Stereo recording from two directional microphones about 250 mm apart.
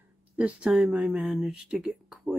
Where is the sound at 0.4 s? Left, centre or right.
Centre.